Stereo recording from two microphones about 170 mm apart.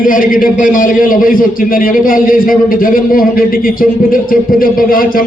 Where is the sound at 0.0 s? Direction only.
55° left (ahead or behind).